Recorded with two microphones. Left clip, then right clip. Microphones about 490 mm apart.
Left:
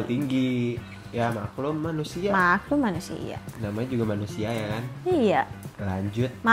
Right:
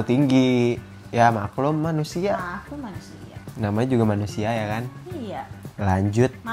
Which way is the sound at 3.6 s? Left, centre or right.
Right.